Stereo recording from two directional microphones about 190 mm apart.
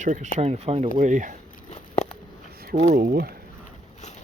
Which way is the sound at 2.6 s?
55° right (ahead or behind).